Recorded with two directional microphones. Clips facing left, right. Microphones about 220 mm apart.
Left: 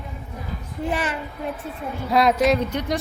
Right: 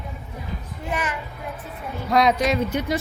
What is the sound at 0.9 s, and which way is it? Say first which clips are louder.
Speech: left 1 dB; 30° left (ahead or behind).